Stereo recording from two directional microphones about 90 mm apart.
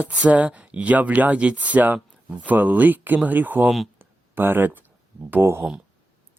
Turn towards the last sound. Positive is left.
turn(degrees=-25)  # may be behind; listen again after turning